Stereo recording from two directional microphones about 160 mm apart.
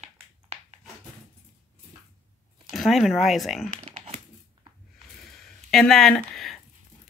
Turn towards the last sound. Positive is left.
turn(degrees=0)  # may be behind; listen again after turning